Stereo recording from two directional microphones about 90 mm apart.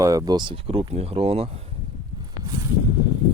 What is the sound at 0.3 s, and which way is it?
Speech, 75° right (ahead or behind).